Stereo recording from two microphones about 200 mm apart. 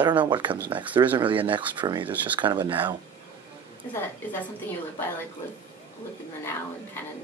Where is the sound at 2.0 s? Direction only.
10° right (ahead or behind).